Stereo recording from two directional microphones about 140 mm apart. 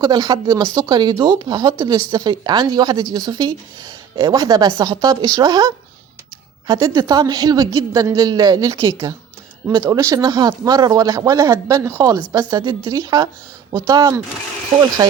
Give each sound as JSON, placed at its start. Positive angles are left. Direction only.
{"t": 0.0, "sound": "speech", "side_deg": -30}
{"t": 8.9, "sound": "speech", "side_deg": -40}